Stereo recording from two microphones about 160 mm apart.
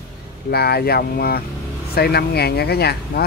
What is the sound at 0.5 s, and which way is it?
Speech, 80° left.